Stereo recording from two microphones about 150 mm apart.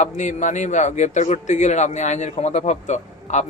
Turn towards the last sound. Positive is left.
turn(degrees=50)  # may be behind; listen again after turning